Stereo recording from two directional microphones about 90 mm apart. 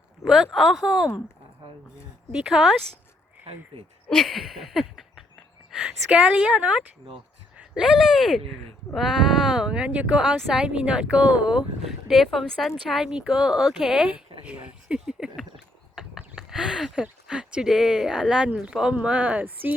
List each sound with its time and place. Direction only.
0.3 s speech: 5° right (ahead or behind)
2.3 s speech: 5° right (ahead or behind)
4.1 s speech: centre (ahead or behind)
14.4 s a sound: 15° right (ahead or behind)
18.6 s speech: 10° right (ahead or behind)